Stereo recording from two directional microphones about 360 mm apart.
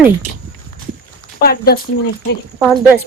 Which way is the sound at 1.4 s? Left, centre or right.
Left.